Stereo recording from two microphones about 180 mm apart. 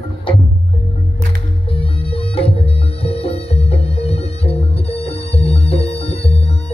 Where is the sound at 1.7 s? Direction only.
30° left (ahead or behind).